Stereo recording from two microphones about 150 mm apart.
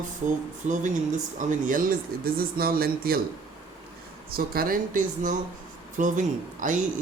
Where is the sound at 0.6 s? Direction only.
55° right (ahead or behind); by 3.2 s 85° right.